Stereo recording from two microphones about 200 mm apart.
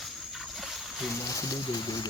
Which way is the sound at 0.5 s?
Centre (ahead or behind).